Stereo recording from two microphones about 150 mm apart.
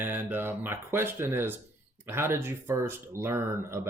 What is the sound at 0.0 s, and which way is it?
Speech, 15° right (ahead or behind).